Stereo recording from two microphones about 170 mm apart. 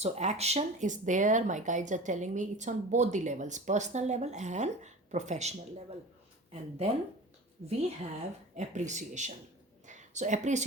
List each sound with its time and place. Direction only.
0.0 s speech: 40° right (ahead or behind)
7.7 s a woman's voice: 40° right (ahead or behind)
9.8 s a sound: 45° right (ahead or behind)